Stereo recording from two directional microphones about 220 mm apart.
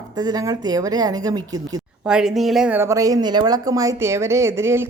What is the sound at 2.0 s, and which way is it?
Speech, 5° right (ahead or behind).